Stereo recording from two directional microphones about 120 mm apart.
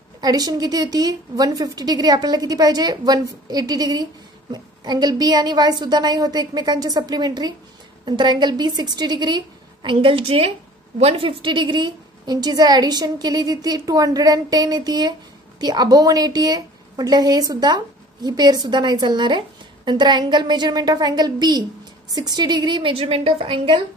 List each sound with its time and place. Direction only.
0.2 s a woman's voice: 35° right (ahead or behind)
9.8 s a woman's voice: 50° right (ahead or behind)